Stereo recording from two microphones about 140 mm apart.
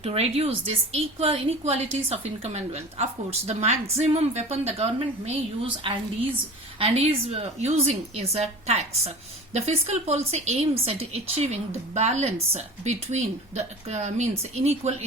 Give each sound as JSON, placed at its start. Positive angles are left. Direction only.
{"t": 0.0, "sound": "a woman's voice", "side_deg": -45}